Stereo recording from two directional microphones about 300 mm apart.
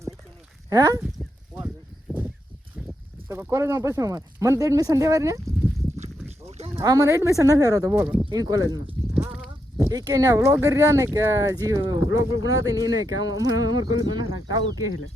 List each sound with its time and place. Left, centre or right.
0.7 s speech: centre
1.2 s a sound: centre
2.7 s speech: centre